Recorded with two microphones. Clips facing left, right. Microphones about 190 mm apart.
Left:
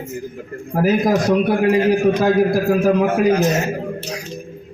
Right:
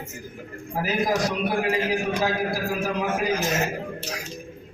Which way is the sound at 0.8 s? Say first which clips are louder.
Left 8 dB; 45° left (ahead or behind).